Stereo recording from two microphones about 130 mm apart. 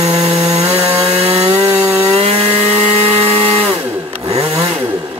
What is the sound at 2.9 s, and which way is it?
Helicopter, 45° right (ahead or behind).